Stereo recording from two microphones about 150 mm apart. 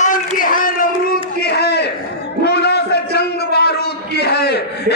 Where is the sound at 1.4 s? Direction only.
90° left.